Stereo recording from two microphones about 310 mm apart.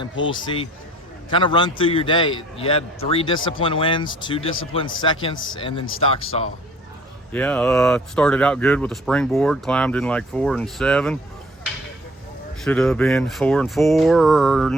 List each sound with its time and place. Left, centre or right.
0.3 s a man's voice: centre
7.3 s speech: centre
12.6 s speech: centre